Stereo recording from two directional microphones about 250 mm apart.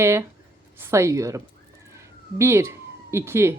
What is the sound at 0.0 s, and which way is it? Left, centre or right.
Speech, centre.